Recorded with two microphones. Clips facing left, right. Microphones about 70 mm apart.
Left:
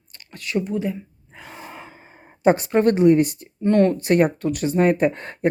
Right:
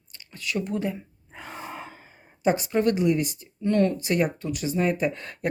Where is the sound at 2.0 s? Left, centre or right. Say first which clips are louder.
Left 7 dB; left.